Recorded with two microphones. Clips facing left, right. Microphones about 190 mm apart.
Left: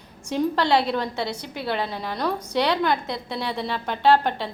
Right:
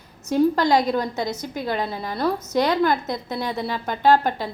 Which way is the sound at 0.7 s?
40° right (ahead or behind).